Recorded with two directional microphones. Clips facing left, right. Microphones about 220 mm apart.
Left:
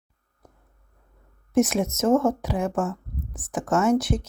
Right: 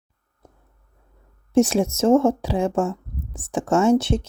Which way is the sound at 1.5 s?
30° right (ahead or behind).